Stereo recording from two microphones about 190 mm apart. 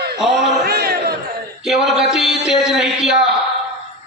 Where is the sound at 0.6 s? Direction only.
55° right (ahead or behind).